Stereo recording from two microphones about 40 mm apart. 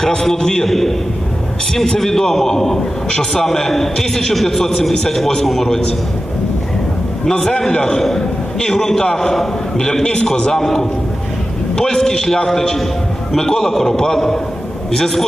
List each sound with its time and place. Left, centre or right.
0.0 s a man's voice: centre
2.0 s a man's voice: centre
7.3 s a man's voice: centre